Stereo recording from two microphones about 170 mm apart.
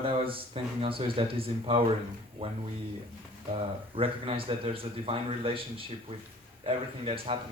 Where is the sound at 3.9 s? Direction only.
35° right (ahead or behind).